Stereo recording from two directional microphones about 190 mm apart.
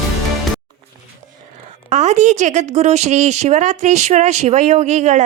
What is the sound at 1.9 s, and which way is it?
Speech, 35° right (ahead or behind).